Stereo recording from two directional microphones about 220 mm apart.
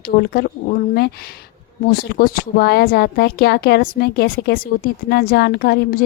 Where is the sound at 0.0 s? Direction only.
45° left (ahead or behind).